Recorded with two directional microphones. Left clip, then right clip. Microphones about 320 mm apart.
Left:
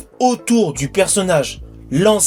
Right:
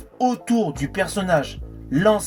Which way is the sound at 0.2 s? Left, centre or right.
Right.